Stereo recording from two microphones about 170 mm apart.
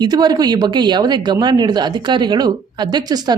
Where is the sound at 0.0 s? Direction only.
25° right (ahead or behind).